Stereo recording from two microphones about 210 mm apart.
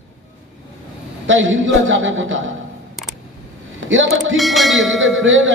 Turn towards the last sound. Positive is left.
turn(degrees=-65)  # may be behind; listen again after turning